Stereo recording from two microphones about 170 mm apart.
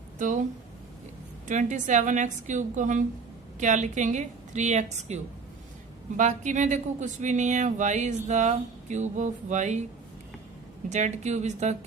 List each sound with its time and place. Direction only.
0.2 s speech: 50° right (ahead or behind)
1.5 s speech: 45° right (ahead or behind)
10.8 s speech: 45° right (ahead or behind)